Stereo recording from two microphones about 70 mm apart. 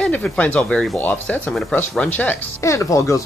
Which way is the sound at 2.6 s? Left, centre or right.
Left.